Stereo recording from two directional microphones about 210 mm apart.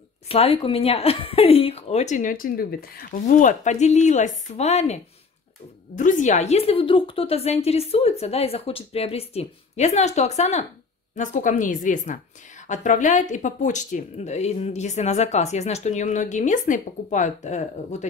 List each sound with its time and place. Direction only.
0.3 s a woman's voice: 25° left (ahead or behind)
5.9 s a woman's voice: 35° left (ahead or behind)